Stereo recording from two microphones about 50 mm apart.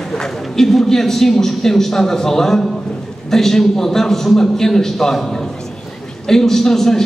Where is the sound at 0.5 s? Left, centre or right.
Centre.